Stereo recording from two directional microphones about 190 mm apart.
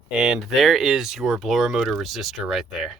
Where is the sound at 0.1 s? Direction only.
5° right (ahead or behind).